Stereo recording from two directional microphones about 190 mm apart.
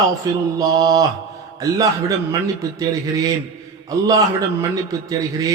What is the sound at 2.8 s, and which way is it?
A man's voice, 20° right (ahead or behind).